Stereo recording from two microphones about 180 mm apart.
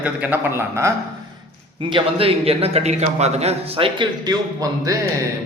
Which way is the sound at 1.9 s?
30° right (ahead or behind).